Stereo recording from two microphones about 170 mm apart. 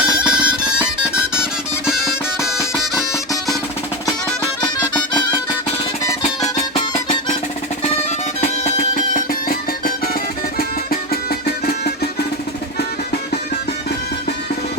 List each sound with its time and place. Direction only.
0.0 s music: 5° right (ahead or behind)
1.9 s music: centre (ahead or behind)
4.6 s music: 25° left (ahead or behind)
6.2 s music: 35° left (ahead or behind)
8.4 s music: 45° left (ahead or behind)
11.1 s music: 65° left (ahead or behind)